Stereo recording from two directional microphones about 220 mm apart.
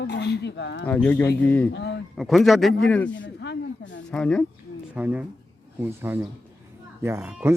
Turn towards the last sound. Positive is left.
turn(degrees=-10)  # may be behind; listen again after turning